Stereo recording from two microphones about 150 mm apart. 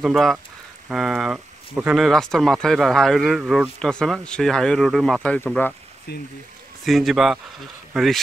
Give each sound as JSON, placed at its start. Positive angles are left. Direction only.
{"t": 0.0, "sound": "speech", "side_deg": 0}
{"t": 6.1, "sound": "speech", "side_deg": 90}
{"t": 6.8, "sound": "speech", "side_deg": 0}